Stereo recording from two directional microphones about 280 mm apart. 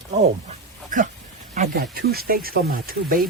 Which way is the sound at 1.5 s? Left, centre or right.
Right.